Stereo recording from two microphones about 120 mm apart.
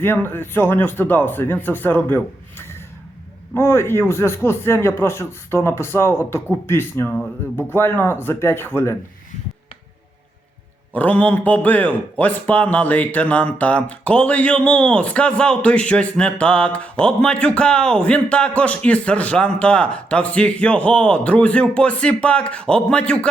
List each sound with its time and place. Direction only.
0.0 s a man's voice: 15° left (ahead or behind)
10.9 s a man's voice: 10° left (ahead or behind)